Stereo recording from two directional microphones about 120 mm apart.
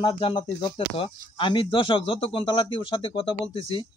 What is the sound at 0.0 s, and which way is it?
A man's voice, 40° left (ahead or behind).